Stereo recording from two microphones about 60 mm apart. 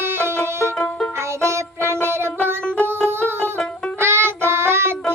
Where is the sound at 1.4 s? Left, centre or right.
Right.